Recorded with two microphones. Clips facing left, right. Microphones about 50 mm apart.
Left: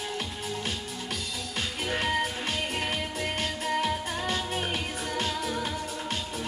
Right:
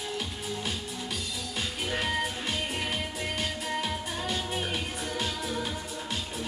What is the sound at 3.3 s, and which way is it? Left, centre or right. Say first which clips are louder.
Music: left 3 dB; left.